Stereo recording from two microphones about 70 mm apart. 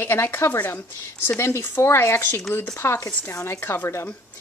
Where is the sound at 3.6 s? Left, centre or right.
Left.